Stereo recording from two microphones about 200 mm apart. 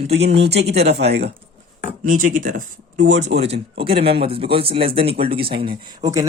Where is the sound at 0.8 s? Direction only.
55° right (ahead or behind).